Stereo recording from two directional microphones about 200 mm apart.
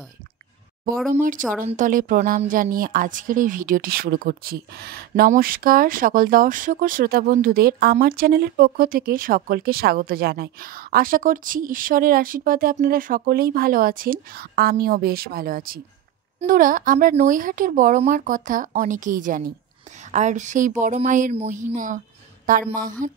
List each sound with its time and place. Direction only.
1.6 s a woman's voice: 40° right (ahead or behind)